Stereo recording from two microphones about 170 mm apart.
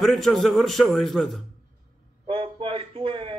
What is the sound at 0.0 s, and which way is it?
A man's voice, centre (ahead or behind).